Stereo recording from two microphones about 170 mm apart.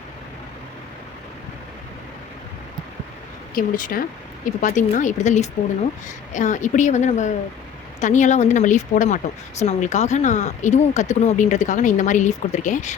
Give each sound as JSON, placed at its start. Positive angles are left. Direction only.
{"t": 3.5, "sound": "speech", "side_deg": 55}